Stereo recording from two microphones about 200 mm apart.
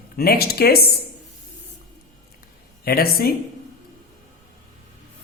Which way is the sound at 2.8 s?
50° left (ahead or behind).